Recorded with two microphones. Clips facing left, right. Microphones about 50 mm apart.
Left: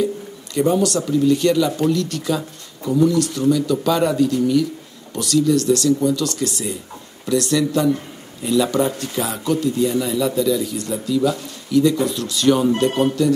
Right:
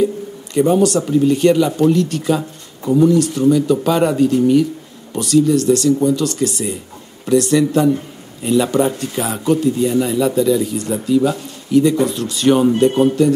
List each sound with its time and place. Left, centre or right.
0.7 s speech: right